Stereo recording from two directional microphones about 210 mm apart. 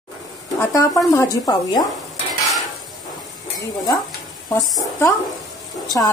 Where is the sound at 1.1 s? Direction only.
15° left (ahead or behind).